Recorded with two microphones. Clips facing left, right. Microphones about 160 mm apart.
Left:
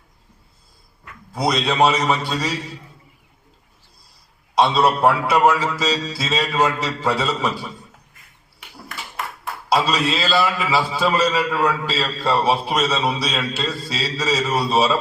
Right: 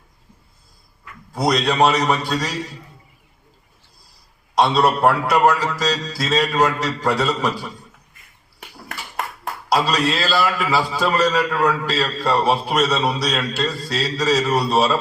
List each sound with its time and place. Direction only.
1.3 s a man's voice: centre (ahead or behind)
4.5 s a man's voice: centre (ahead or behind)
9.7 s a man's voice: centre (ahead or behind)